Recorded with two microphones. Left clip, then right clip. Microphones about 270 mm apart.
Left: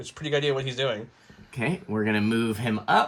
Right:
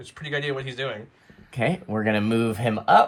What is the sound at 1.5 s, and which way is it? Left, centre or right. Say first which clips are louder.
Speech: right 4 dB; right.